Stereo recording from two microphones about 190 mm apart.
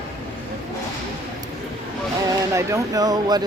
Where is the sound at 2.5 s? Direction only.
15° right (ahead or behind).